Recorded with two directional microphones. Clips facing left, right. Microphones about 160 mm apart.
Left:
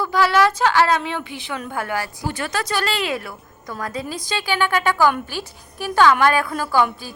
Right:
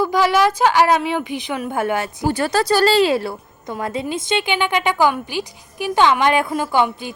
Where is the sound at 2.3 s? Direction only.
35° right (ahead or behind).